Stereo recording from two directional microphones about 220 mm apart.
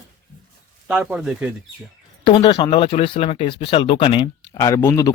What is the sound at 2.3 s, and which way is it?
Speech, 20° left (ahead or behind).